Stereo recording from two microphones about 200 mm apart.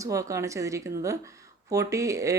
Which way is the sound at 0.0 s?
15° right (ahead or behind).